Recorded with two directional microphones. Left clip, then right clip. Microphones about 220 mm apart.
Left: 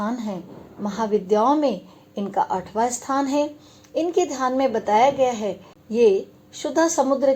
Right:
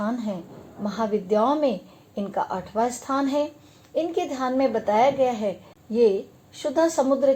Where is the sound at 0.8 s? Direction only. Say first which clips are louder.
Left 3 dB; 30° left (ahead or behind).